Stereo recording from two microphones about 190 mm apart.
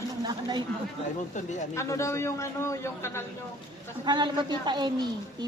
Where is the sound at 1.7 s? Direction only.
15° left (ahead or behind).